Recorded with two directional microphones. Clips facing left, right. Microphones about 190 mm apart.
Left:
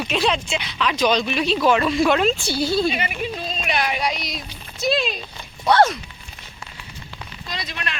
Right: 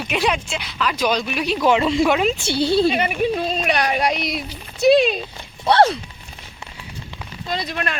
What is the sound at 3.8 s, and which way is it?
Speech, 50° right (ahead or behind).